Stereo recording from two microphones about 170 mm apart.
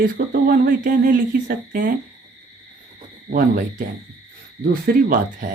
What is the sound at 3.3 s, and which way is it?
A woman's voice, 55° right (ahead or behind).